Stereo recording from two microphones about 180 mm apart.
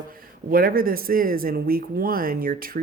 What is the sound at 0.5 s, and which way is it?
Speech, 55° right (ahead or behind).